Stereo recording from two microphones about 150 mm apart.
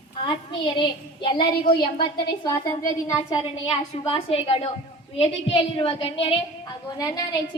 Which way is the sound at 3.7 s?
35° left (ahead or behind).